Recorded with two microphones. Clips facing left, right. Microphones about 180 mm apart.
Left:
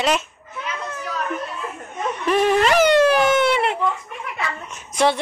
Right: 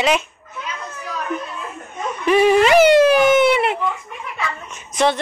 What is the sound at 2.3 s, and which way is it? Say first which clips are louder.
Speech: right 4 dB; 5° right (ahead or behind).